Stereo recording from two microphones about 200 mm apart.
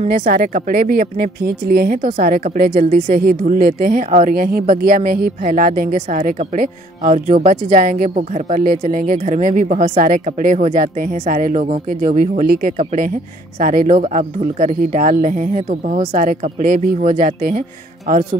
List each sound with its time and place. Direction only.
0.0 s speech: 45° right (ahead or behind)